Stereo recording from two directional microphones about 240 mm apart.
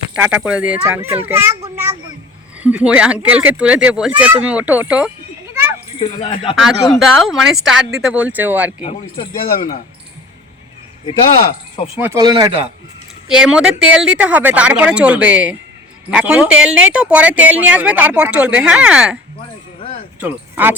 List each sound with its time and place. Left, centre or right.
0.2 s speech: centre
1.7 s a sound: centre
2.6 s speech: centre
6.0 s a man's voice: left
7.0 s speech: centre
8.8 s a man's voice: left
11.9 s speech: centre
13.2 s speech: centre
20.1 s speech: centre